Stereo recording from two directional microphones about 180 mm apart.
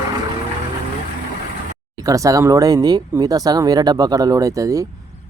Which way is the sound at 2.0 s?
20° right (ahead or behind).